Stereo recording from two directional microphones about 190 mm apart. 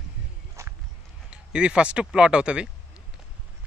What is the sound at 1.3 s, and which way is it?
Speech, 5° right (ahead or behind).